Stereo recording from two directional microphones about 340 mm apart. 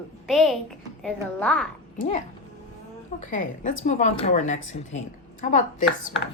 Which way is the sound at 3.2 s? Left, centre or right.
Left.